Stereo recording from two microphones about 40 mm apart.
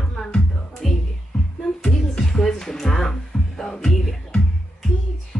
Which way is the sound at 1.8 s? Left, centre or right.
Centre.